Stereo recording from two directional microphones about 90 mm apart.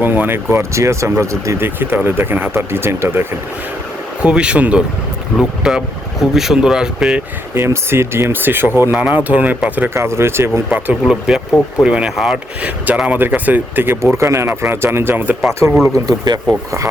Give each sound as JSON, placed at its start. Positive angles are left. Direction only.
{"t": 0.0, "sound": "speech", "side_deg": -20}
{"t": 4.2, "sound": "speech", "side_deg": -10}
{"t": 7.5, "sound": "speech", "side_deg": -25}
{"t": 9.9, "sound": "speech", "side_deg": -30}
{"t": 10.7, "sound": "speech", "side_deg": -20}
{"t": 11.0, "sound": "speech", "side_deg": -5}
{"t": 12.6, "sound": "speech", "side_deg": -15}
{"t": 15.9, "sound": "speech", "side_deg": -45}